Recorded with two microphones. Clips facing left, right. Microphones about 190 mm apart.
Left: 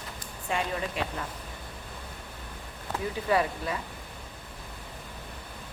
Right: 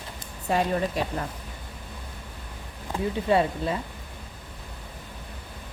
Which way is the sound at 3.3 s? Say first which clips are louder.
Right 3 dB; 30° right (ahead or behind).